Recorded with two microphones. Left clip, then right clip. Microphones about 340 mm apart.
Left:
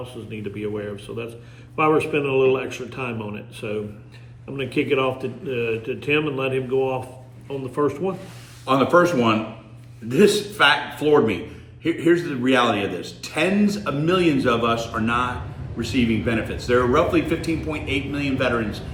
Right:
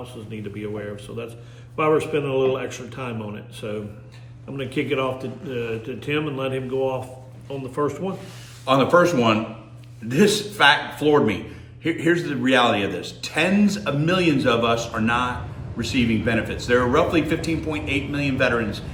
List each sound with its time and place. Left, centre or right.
0.3 s speech: centre
8.6 s a man's voice: centre